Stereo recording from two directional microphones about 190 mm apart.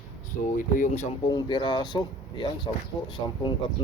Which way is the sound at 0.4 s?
45° left (ahead or behind).